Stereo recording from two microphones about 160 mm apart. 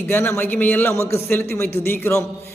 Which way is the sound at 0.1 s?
15° left (ahead or behind).